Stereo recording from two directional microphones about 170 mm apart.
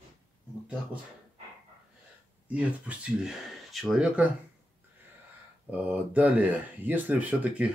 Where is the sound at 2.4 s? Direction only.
10° right (ahead or behind).